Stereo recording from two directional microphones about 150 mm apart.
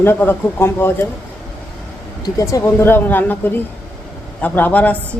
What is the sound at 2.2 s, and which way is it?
A man's voice, 20° left (ahead or behind).